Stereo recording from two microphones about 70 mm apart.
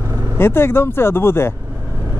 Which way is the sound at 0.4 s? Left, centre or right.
Left.